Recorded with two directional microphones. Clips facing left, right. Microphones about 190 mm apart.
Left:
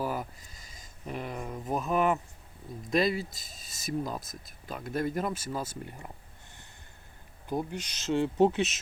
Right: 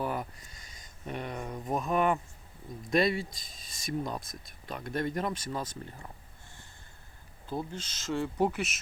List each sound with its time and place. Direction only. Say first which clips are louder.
0.0 s a sound: left 1 dB; 5° left (ahead or behind)
2.9 s speech: even; centre (ahead or behind)
7.4 s speech: left 3 dB; 15° left (ahead or behind)